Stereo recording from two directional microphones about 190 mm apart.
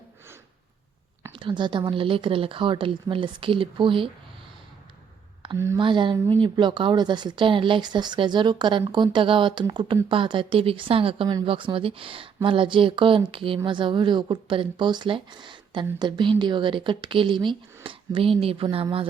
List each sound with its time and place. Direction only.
1.3 s speech: 25° right (ahead or behind)
5.7 s speech: 25° right (ahead or behind)